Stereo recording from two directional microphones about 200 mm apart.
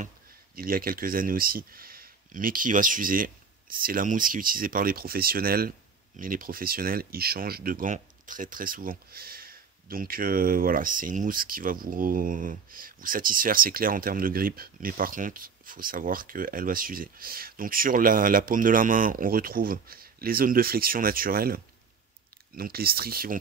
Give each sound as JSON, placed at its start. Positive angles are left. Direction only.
{"t": 0.6, "sound": "speech", "side_deg": -45}
{"t": 22.6, "sound": "speech", "side_deg": -50}